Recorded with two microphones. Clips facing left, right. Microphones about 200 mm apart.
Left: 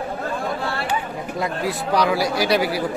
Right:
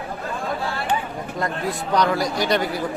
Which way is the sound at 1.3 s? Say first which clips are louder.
Left 1 dB; 5° left (ahead or behind).